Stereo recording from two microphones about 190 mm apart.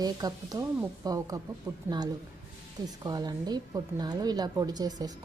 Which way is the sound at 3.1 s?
20° right (ahead or behind).